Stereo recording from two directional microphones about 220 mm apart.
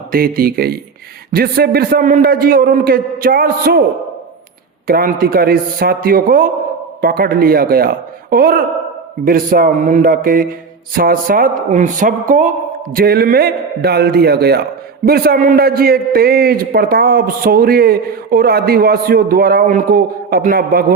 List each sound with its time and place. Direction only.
0.1 s a man's voice: 40° right (ahead or behind)
4.9 s a man's voice: 40° right (ahead or behind)